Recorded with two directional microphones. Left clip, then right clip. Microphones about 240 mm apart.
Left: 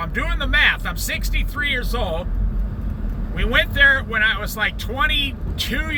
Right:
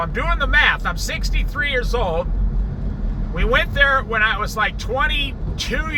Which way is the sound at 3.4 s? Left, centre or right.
Right.